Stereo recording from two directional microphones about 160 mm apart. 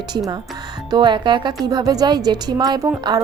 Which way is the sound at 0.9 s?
30° right (ahead or behind).